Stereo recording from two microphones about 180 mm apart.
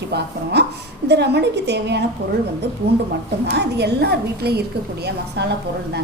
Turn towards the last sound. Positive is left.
turn(degrees=-65)  # may be behind; listen again after turning